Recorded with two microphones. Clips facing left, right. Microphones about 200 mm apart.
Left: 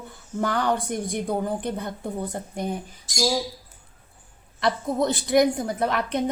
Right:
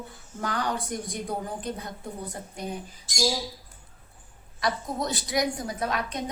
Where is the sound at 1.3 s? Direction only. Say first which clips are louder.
Left 6 dB; 60° left (ahead or behind).